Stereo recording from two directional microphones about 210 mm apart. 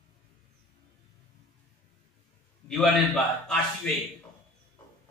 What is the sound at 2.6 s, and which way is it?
A man's voice, centre (ahead or behind).